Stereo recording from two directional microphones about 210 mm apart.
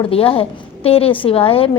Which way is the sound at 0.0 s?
25° left (ahead or behind).